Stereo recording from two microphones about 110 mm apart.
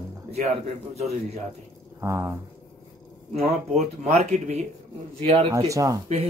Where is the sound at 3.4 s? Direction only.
90° right.